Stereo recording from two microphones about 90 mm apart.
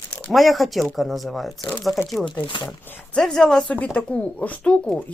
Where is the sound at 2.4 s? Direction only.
60° left (ahead or behind).